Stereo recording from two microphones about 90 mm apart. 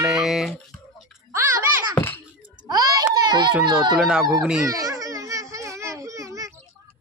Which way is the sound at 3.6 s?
55° right (ahead or behind).